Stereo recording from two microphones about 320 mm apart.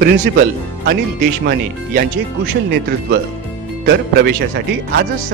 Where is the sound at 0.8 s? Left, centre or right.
Right.